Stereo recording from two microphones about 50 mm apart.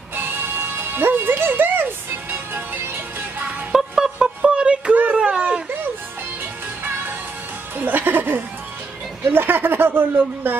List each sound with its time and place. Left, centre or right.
0.1 s music: right
3.7 s a sound: centre
6.8 s music: right
9.2 s speech: right